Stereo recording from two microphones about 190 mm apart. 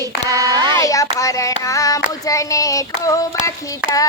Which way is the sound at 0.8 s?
15° left (ahead or behind).